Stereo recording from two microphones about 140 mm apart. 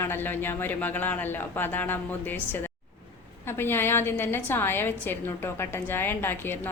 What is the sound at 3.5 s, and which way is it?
A woman's voice, 15° left (ahead or behind).